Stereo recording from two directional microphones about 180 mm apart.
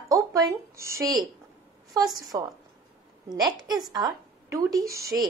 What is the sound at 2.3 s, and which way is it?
A woman's voice, 20° right (ahead or behind).